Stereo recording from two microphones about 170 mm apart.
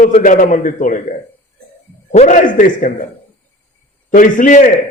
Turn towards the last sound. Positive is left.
turn(degrees=50)  # may be behind; listen again after turning